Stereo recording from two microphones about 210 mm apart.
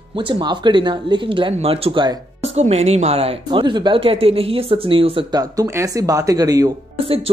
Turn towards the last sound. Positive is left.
turn(degrees=-15)  # may be behind; listen again after turning